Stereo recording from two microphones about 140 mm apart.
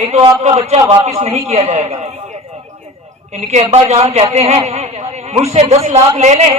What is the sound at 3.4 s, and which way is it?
A man's voice, 55° right (ahead or behind).